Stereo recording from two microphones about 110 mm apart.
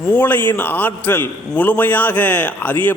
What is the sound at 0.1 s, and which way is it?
A man's voice, 15° left (ahead or behind).